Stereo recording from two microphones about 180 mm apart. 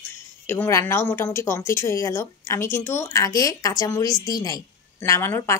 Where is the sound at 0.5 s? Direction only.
15° left (ahead or behind).